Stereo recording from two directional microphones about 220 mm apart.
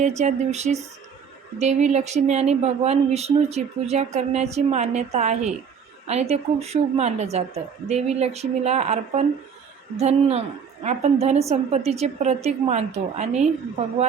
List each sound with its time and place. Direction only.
0.0 s a woman's voice: 30° right (ahead or behind)